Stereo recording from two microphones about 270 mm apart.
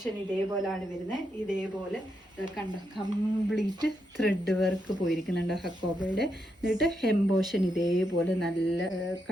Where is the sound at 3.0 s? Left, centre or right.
Centre.